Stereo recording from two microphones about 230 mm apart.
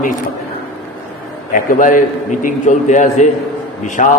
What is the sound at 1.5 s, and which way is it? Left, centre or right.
A man's voice, left.